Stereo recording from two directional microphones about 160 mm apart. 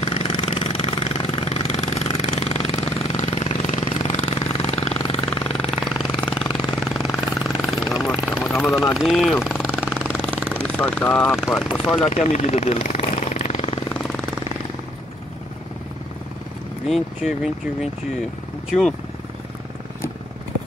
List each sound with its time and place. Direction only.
0.0 s vehicle: 35° left (ahead or behind)
3.8 s jackhammer: 40° left (ahead or behind)
6.9 s jackhammer: centre (ahead or behind)
7.2 s vehicle: 20° left (ahead or behind)
7.6 s vehicle: centre (ahead or behind)
8.9 s jackhammer: centre (ahead or behind)
10.0 s vehicle: 10° left (ahead or behind)
10.6 s speech: 10° left (ahead or behind)
11.3 s speech: centre (ahead or behind)
12.1 s vehicle: 45° left (ahead or behind)
16.8 s speech: centre (ahead or behind)